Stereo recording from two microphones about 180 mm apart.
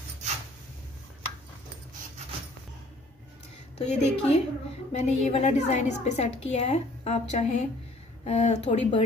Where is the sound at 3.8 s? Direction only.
35° left (ahead or behind).